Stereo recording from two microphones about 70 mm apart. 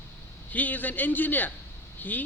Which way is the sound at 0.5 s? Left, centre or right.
Left.